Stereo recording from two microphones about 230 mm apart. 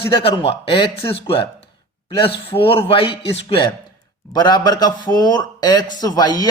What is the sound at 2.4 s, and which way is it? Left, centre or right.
A man's voice, left.